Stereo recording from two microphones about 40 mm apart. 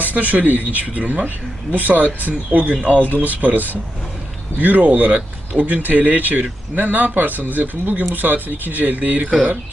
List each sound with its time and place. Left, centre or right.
0.0 s speech: right